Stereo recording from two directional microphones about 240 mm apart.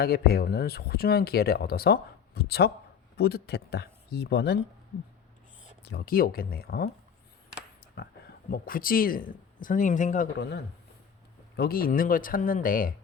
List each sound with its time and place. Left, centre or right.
0.0 s speech: left
5.8 s speech: left
8.4 s speech: left